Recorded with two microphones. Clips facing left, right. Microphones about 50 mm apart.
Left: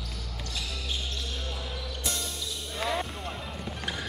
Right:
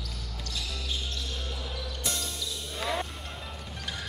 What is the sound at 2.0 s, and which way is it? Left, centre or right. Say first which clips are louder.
Music: even; centre.